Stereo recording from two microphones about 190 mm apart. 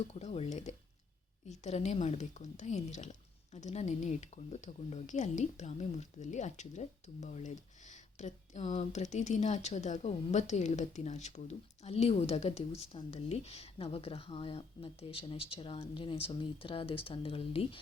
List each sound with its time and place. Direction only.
0.1 s speech: 35° left (ahead or behind)